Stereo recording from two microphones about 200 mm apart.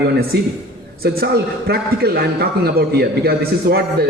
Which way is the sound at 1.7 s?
50° right (ahead or behind).